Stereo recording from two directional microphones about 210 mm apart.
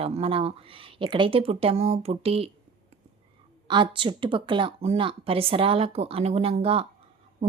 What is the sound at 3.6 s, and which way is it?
Speech, 20° right (ahead or behind).